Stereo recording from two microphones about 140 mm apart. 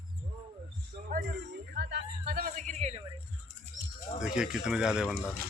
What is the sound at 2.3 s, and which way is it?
Speech, 90° right.